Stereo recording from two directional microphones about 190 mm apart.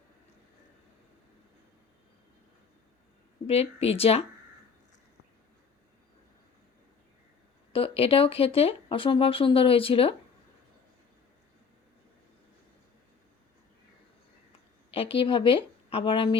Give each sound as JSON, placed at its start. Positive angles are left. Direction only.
{"t": 3.4, "sound": "speech", "side_deg": 30}
{"t": 7.7, "sound": "speech", "side_deg": 30}
{"t": 14.8, "sound": "a woman's voice", "side_deg": 30}